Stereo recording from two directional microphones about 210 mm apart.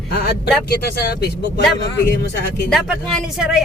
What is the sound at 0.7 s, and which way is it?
Speech, 50° left (ahead or behind).